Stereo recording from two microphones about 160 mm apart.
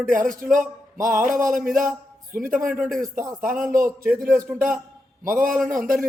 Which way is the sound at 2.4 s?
60° right (ahead or behind).